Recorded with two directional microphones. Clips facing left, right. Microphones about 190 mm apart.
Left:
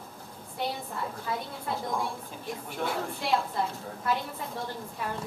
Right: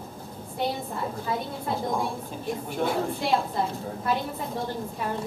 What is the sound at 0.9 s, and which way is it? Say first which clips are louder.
A woman's voice: right 4 dB; 25° right (ahead or behind).